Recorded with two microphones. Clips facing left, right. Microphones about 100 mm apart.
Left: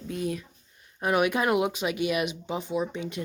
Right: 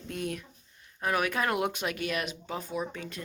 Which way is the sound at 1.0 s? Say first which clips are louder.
Left 5 dB; 20° left (ahead or behind).